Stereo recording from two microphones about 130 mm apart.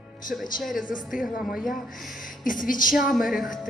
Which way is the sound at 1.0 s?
Centre (ahead or behind).